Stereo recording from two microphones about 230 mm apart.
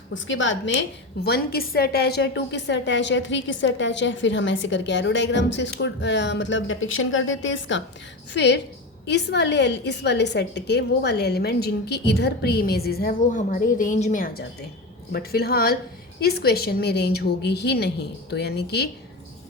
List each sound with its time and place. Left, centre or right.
0.1 s a woman's voice: left